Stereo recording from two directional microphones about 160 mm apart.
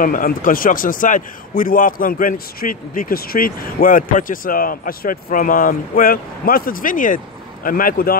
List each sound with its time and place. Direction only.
0.0 s a man's voice: 60° left (ahead or behind)